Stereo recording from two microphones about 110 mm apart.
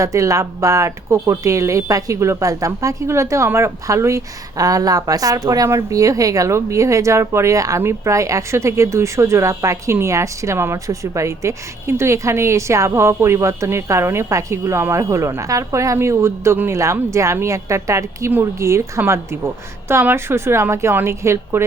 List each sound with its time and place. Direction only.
0.0 s speech: 30° right (ahead or behind)